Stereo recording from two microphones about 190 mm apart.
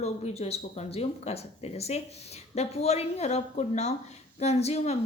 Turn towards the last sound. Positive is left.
turn(degrees=35)  # may be behind; listen again after turning